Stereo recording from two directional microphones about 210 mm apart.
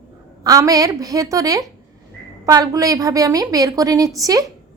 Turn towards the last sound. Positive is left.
turn(degrees=-15)  # may be behind; listen again after turning